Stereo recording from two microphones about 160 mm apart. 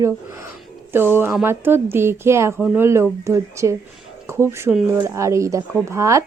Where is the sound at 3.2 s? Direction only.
20° right (ahead or behind).